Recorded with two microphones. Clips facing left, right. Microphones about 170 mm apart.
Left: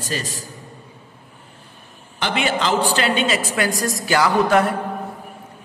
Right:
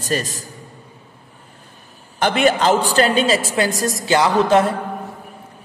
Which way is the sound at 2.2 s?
45° right (ahead or behind).